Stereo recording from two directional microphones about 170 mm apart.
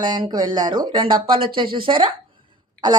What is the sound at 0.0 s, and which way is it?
Speech, 25° right (ahead or behind).